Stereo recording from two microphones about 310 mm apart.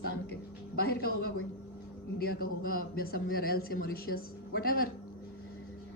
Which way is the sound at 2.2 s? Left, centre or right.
Left.